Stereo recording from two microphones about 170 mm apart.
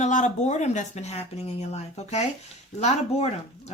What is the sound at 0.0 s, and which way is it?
Speech, 45° left (ahead or behind).